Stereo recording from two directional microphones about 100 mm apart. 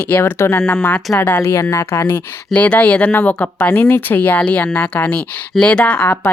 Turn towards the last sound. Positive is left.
turn(degrees=15)  # may be behind; listen again after turning